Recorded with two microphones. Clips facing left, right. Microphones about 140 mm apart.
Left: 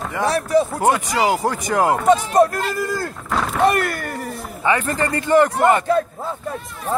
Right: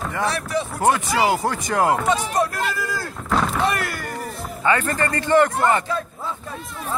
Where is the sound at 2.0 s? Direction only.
50° left (ahead or behind).